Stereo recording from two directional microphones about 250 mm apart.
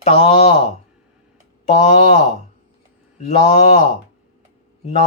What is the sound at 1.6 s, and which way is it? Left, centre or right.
Speech, left.